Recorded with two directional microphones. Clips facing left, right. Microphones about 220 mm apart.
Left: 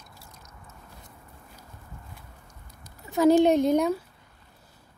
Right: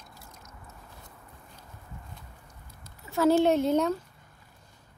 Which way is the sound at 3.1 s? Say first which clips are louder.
Left 3 dB; 15° left (ahead or behind).